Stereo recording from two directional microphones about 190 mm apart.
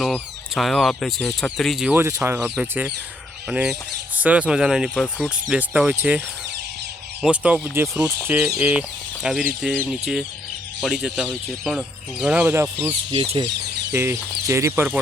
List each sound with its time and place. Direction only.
0.0 s speech: centre (ahead or behind)
12.8 s speech: 25° right (ahead or behind)
13.9 s speech: 15° right (ahead or behind)